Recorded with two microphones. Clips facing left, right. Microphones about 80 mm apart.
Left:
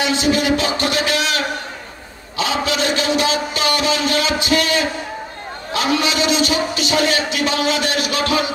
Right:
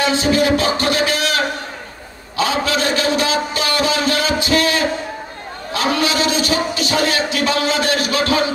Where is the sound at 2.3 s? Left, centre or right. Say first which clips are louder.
Right 2 dB; right.